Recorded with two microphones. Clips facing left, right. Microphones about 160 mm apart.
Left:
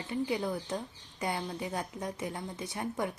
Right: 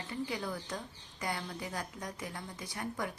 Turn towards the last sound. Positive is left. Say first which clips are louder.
# left 4 dB
turn(degrees=25)  # may be behind; listen again after turning